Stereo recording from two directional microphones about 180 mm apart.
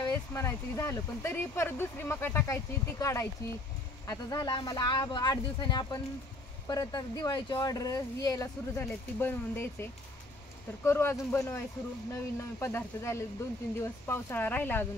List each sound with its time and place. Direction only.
0.0 s speech: 15° left (ahead or behind)